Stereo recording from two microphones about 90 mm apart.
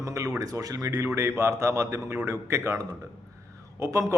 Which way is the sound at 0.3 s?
40° right (ahead or behind).